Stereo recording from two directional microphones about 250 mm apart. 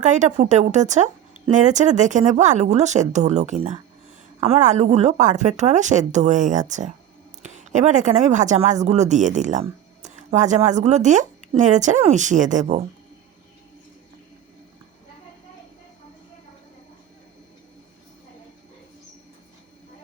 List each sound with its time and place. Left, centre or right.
0.0 s speech: right